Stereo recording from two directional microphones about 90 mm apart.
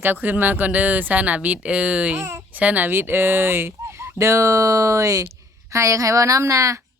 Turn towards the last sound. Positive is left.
turn(degrees=-35)  # may be behind; listen again after turning